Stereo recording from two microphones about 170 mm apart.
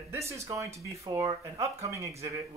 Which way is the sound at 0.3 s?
15° right (ahead or behind).